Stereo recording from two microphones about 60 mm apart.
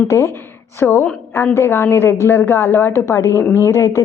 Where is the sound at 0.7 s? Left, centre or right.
Left.